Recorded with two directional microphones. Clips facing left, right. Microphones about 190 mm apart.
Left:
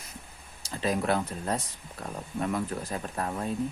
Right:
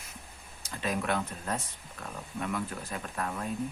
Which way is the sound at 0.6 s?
35° left (ahead or behind).